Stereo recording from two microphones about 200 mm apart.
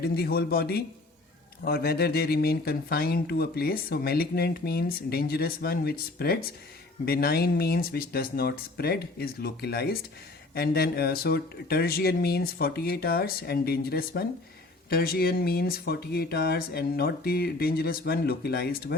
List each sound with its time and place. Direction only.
0.0 s speech: 50° left (ahead or behind)